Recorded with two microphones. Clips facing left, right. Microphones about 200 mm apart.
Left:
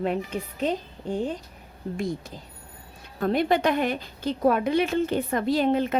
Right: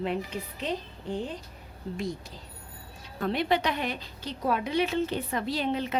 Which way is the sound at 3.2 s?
45° left (ahead or behind).